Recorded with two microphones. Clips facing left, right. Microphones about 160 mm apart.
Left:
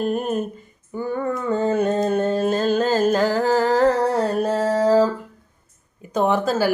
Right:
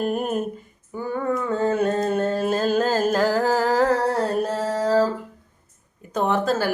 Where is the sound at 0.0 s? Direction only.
5° right (ahead or behind).